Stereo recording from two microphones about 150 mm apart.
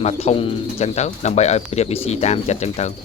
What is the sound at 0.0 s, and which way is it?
Speech, 40° left (ahead or behind).